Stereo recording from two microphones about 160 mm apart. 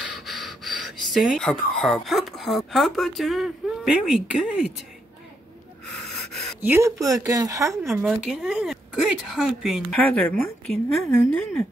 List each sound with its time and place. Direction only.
0.2 s speech: centre (ahead or behind)
6.6 s speech: 15° right (ahead or behind)
7.9 s a woman's voice: centre (ahead or behind)
11.1 s speech: 10° left (ahead or behind)